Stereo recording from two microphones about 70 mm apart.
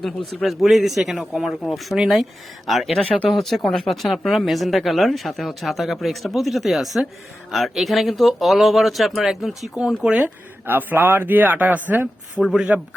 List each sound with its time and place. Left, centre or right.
0.4 s speech: centre
10.7 s speech: right
12.4 s a man's voice: centre